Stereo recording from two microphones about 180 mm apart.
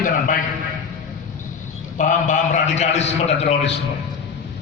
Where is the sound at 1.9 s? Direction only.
45° left (ahead or behind).